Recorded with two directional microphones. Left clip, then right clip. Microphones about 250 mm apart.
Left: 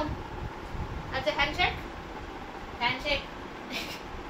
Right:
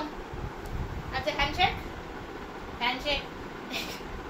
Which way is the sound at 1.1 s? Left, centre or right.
Centre.